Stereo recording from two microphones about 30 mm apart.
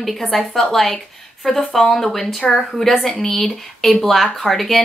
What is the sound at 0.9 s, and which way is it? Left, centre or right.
Speech, centre.